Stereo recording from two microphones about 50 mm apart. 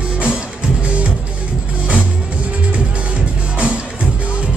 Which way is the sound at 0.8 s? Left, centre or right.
Right.